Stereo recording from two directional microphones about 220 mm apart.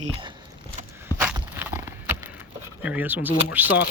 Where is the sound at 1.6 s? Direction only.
10° right (ahead or behind).